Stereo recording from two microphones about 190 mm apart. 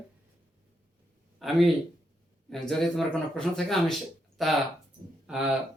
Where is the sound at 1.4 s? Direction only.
Centre (ahead or behind).